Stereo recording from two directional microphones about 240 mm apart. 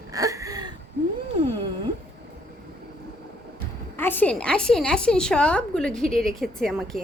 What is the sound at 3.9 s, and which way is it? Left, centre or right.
A woman's voice, centre.